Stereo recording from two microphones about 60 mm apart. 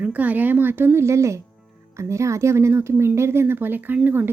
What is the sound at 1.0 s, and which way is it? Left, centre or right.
Speech, right.